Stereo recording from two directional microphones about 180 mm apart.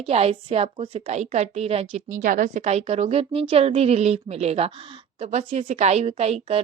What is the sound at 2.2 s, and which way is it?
A woman's voice, 45° right (ahead or behind).